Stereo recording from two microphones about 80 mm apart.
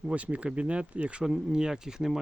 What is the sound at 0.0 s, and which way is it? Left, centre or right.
Speech, centre.